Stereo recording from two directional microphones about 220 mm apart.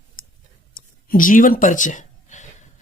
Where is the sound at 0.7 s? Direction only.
40° left (ahead or behind).